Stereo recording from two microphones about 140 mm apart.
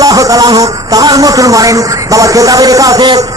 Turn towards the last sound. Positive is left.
turn(degrees=-25)  # may be behind; listen again after turning